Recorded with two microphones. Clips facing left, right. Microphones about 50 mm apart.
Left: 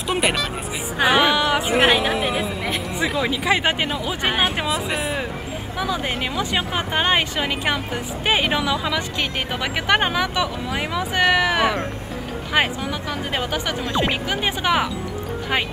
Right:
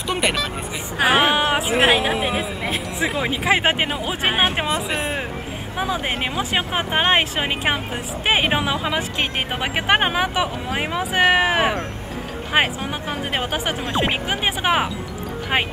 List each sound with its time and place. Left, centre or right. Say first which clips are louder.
0.1 s music: left 1 dB; centre
0.9 s music: even; centre
1.3 s a sound: even; right
1.7 s music: even; centre
3.0 s speech: even; right
4.6 s speech: even; centre
5.8 s speech: right 1 dB; right
13.4 s speech: even; right